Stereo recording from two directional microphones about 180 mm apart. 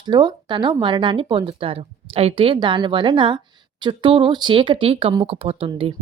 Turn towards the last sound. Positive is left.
turn(degrees=-30)  # may be behind; listen again after turning